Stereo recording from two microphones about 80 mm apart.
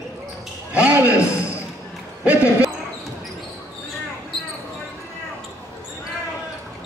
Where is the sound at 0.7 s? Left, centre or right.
Centre.